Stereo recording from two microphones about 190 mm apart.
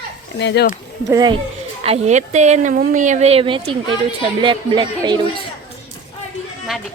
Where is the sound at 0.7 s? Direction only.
20° right (ahead or behind).